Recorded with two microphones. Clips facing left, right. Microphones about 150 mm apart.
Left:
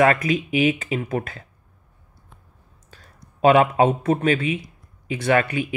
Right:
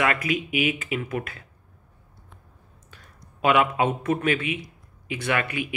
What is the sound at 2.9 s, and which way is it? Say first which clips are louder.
A man's voice: left 3 dB; 35° left (ahead or behind).